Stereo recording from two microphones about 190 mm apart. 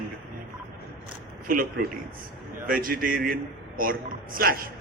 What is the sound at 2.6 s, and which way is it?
A man's voice, 50° right (ahead or behind).